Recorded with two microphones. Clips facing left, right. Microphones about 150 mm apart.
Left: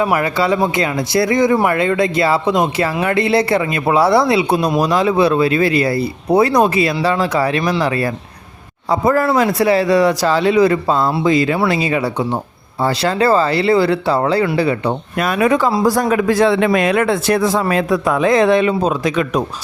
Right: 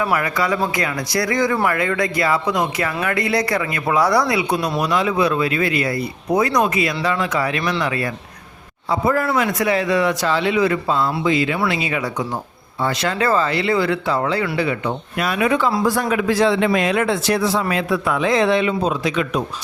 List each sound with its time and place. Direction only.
0.0 s speech: 25° left (ahead or behind); by 19.4 s 45° left (ahead or behind)